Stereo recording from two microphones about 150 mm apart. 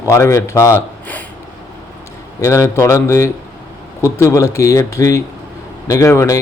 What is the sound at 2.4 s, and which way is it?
Speech, 20° left (ahead or behind).